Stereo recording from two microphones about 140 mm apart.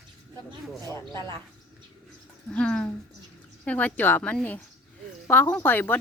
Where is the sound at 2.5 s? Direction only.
5° left (ahead or behind).